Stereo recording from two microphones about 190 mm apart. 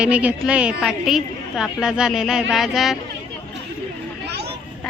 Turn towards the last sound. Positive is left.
turn(degrees=-60)  # may be behind; listen again after turning